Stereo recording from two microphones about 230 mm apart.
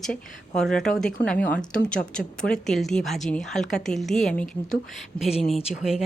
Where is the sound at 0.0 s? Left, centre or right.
Centre.